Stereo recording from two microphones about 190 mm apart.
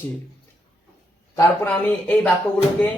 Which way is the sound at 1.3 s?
10° left (ahead or behind).